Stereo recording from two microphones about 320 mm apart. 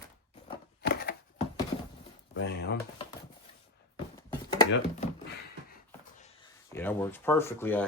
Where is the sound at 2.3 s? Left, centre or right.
Left.